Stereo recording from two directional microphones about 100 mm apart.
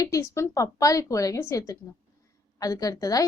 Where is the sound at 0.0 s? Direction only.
30° left (ahead or behind).